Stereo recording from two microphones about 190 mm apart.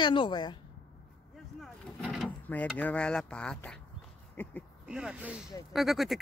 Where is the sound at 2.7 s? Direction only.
5° left (ahead or behind).